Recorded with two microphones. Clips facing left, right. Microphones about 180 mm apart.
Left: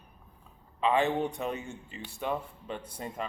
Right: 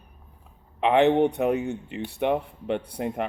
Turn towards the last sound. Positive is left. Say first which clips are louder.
# right 9 dB
turn(degrees=-65)  # may be behind; listen again after turning